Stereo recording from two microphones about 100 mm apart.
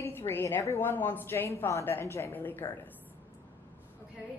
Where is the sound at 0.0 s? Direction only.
25° left (ahead or behind).